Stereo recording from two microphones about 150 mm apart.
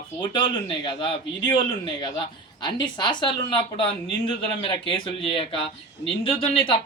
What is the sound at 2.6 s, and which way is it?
Speech, 30° left (ahead or behind).